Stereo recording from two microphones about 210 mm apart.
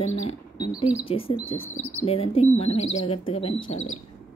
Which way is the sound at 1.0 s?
25° left (ahead or behind).